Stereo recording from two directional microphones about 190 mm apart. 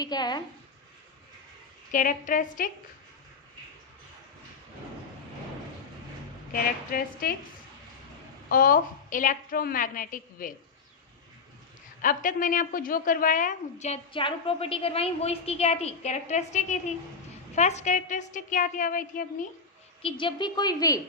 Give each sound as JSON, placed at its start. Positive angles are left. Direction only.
{"t": 0.0, "sound": "a woman's voice", "side_deg": 20}
{"t": 1.9, "sound": "a woman's voice", "side_deg": 45}
{"t": 6.5, "sound": "a woman's voice", "side_deg": 50}
{"t": 8.4, "sound": "a woman's voice", "side_deg": 50}
{"t": 12.0, "sound": "a woman's voice", "side_deg": 45}
{"t": 20.0, "sound": "a woman's voice", "side_deg": 30}